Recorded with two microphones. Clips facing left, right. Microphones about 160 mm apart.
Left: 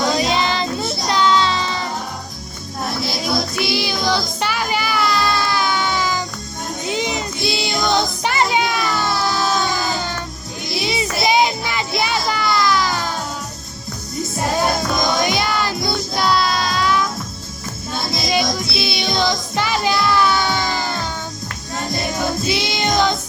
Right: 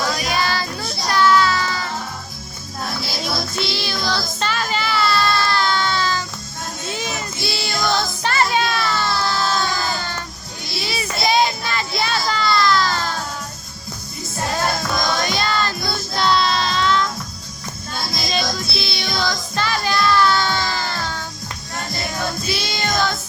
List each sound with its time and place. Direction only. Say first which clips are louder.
0.0 s child singing: left 4 dB; 20° left (ahead or behind)
3.1 s music: left 5 dB; centre (ahead or behind)
3.6 s child singing: left 4 dB; 15° left (ahead or behind)
5.5 s music: even; 15° left (ahead or behind)
10.8 s child singing: left 4 dB; 20° left (ahead or behind)
14.3 s music: left 3 dB; 20° left (ahead or behind)
16.1 s music: right 1 dB; 5° left (ahead or behind)
18.3 s music: left 4 dB; 15° left (ahead or behind)